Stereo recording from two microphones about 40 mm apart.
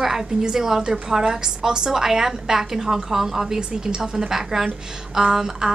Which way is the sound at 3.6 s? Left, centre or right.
Right.